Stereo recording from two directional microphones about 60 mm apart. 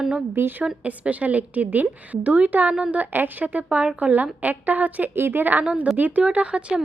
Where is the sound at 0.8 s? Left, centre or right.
Right.